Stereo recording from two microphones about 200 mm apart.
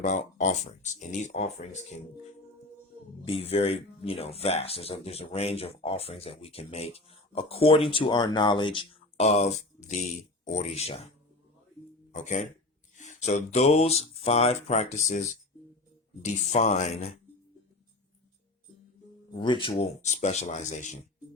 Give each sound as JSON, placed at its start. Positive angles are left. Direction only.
{"t": 0.0, "sound": "speech", "side_deg": 35}
{"t": 3.2, "sound": "speech", "side_deg": 30}
{"t": 12.1, "sound": "speech", "side_deg": 35}
{"t": 19.3, "sound": "speech", "side_deg": 25}